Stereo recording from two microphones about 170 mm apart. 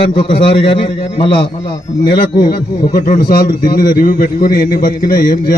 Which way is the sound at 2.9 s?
50° left (ahead or behind).